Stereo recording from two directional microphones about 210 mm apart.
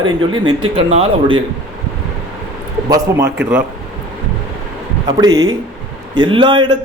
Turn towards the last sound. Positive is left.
turn(degrees=-20)  # may be behind; listen again after turning